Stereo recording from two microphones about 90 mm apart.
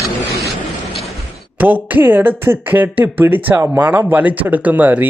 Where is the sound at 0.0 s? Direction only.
35° left (ahead or behind).